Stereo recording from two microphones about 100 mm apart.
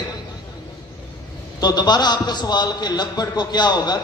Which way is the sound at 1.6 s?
45° left (ahead or behind).